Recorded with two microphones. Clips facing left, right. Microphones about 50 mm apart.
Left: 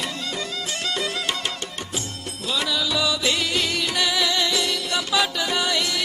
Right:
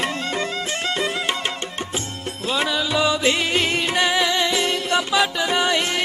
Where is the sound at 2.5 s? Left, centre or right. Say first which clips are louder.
Right 3 dB; right.